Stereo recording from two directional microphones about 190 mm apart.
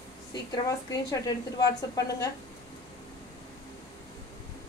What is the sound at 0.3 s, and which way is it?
A woman's voice, 20° left (ahead or behind).